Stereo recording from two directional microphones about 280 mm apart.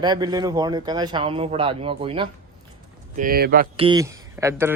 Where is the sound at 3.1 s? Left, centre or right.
Right.